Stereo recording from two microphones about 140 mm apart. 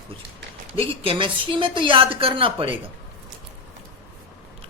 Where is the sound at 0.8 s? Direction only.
40° right (ahead or behind).